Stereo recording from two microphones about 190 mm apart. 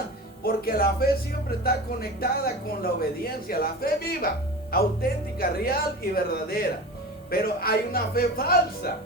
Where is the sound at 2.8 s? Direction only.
50° left (ahead or behind).